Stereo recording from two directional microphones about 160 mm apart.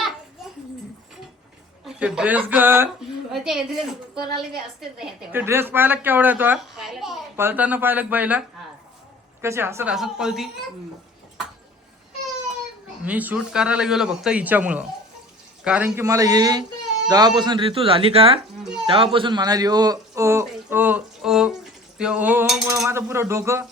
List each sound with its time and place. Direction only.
1.8 s speech: 5° right (ahead or behind)
3.3 s a woman's voice: centre (ahead or behind)
5.3 s a man's voice: 15° right (ahead or behind)
7.3 s a man's voice: 10° right (ahead or behind)
9.9 s a woman's voice: 5° right (ahead or behind)
13.1 s a man's voice: 10° right (ahead or behind)
22.9 s a man's voice: 15° right (ahead or behind)